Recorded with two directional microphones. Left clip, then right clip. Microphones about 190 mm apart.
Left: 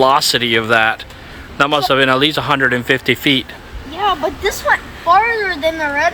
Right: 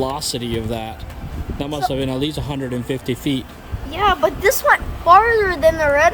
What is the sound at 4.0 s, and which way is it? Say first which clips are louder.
Speech: even; 20° right (ahead or behind).